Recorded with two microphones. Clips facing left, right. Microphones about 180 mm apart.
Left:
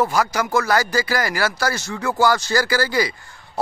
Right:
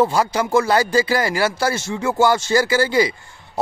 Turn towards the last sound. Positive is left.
turn(degrees=-25)  # may be behind; listen again after turning